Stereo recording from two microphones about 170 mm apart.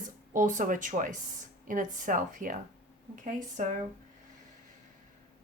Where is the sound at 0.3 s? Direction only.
50° right (ahead or behind).